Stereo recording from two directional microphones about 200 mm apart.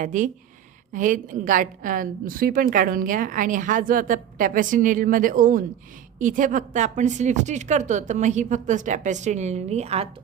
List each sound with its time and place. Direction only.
0.0 s a woman's voice: 40° right (ahead or behind)